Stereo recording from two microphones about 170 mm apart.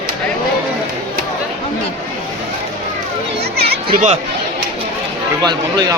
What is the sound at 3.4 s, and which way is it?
Chatter, 70° right (ahead or behind).